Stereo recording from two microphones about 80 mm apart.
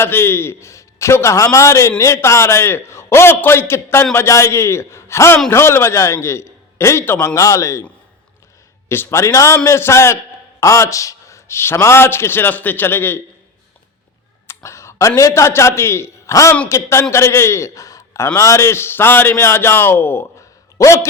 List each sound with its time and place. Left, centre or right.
0.0 s a man's voice: left
7.3 s a man's voice: left
8.9 s a man's voice: left
14.4 s a man's voice: left